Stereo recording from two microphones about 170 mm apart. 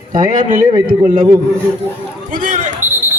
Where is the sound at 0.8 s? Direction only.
50° right (ahead or behind).